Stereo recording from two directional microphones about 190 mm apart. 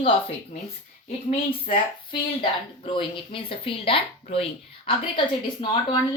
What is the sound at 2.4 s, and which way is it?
Speech, 25° left (ahead or behind).